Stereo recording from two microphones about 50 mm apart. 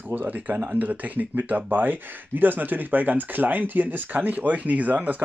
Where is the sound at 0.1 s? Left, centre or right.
Right.